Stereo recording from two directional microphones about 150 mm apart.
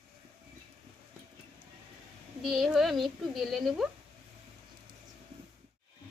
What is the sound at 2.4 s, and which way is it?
A woman's voice, 5° right (ahead or behind).